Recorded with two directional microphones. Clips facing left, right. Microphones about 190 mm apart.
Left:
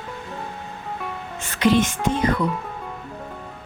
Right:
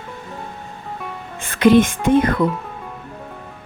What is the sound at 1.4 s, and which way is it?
Speech, 50° right (ahead or behind).